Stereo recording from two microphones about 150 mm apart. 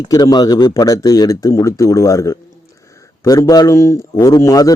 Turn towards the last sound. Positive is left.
turn(degrees=25)  # may be behind; listen again after turning